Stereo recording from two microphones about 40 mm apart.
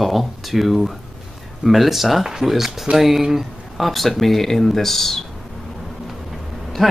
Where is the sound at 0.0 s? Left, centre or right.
Centre.